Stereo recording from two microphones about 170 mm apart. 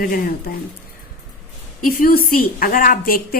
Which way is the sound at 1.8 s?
60° left (ahead or behind).